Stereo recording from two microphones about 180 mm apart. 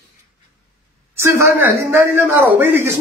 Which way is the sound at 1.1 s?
15° right (ahead or behind).